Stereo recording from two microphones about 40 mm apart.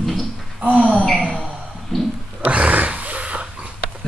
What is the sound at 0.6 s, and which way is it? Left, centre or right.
Speech, right.